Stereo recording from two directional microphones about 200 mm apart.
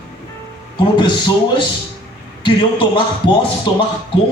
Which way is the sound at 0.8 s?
25° left (ahead or behind).